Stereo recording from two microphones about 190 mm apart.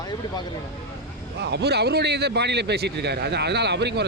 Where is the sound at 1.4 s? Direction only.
60° right (ahead or behind).